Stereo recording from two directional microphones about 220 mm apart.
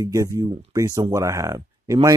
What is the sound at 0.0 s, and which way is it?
Speech, 15° right (ahead or behind).